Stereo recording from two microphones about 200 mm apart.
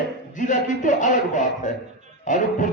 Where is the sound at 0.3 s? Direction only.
40° left (ahead or behind).